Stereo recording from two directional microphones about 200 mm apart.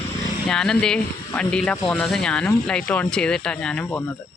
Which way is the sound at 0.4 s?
5° left (ahead or behind).